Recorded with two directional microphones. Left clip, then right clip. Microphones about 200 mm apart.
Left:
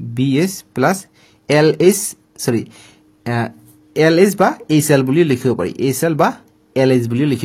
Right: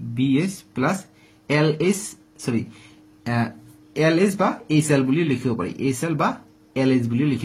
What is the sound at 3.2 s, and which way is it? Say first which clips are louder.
Speech: left 4 dB; 40° left (ahead or behind).